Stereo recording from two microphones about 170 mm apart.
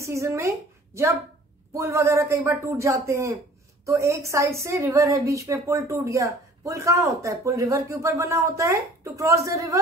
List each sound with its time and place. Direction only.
0.0 s a woman's voice: 15° right (ahead or behind)